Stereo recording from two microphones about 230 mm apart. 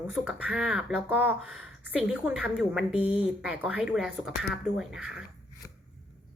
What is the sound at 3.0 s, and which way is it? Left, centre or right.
Speech, left.